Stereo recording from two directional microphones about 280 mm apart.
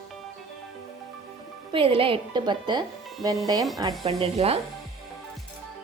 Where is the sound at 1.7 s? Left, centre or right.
Centre.